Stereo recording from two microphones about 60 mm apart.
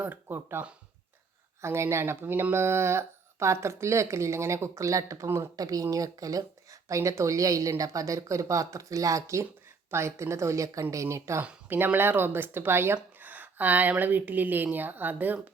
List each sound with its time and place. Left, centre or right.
0.0 s speech: right
0.3 s speech: right
1.6 s speech: right
5.5 s speech: right
11.7 s speech: right
13.1 s speech: right